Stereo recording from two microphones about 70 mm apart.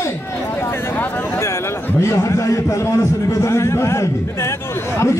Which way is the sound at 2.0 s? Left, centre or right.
Left.